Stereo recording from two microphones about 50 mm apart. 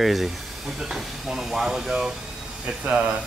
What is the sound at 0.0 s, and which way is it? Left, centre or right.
Speech, centre.